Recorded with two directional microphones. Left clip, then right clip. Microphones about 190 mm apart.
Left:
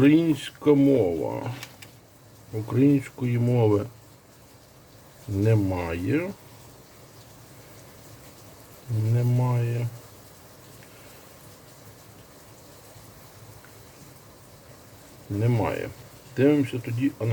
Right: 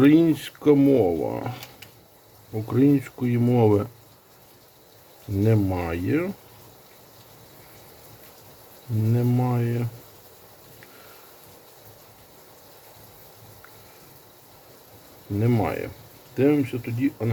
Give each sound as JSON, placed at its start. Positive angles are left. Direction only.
{"t": 0.0, "sound": "speech", "side_deg": -15}
{"t": 2.6, "sound": "speech", "side_deg": -10}
{"t": 5.4, "sound": "speech", "side_deg": -10}
{"t": 9.1, "sound": "speech", "side_deg": -20}
{"t": 15.4, "sound": "speech", "side_deg": -10}
{"t": 16.8, "sound": "speech", "side_deg": -20}